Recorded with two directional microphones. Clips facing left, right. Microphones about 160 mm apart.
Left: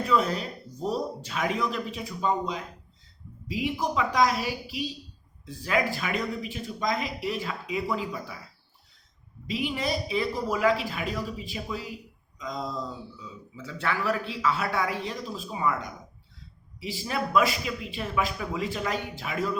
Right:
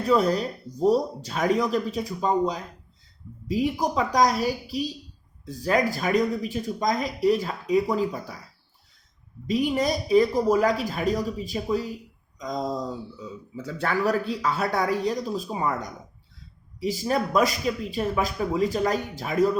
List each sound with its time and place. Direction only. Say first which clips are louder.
0.0 s speech: right 4 dB; 40° right (ahead or behind)
9.5 s speech: right 6 dB; 45° right (ahead or behind)